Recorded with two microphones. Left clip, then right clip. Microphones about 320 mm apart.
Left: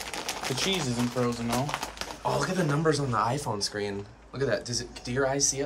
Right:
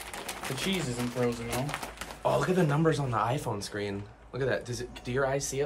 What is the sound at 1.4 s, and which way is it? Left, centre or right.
Speech, centre.